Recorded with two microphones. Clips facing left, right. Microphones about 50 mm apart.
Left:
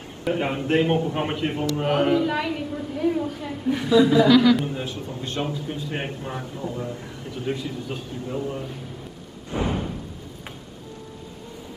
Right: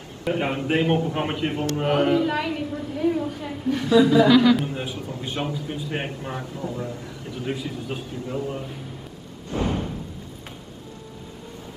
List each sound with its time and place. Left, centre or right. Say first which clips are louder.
0.2 s a woman's voice: even; centre
3.6 s a man's voice: even; centre
3.9 s a woman's voice: even; centre
6.4 s a man's voice: even; centre
7.4 s a man's voice: left 1 dB; centre
9.5 s music: even; centre